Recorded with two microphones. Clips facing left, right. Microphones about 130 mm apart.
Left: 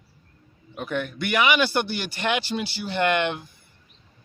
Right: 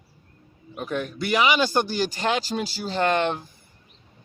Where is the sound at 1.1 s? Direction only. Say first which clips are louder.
Right 1 dB; 35° right (ahead or behind).